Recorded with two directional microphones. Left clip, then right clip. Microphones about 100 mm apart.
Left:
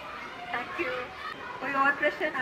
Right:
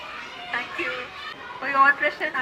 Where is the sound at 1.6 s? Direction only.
30° right (ahead or behind).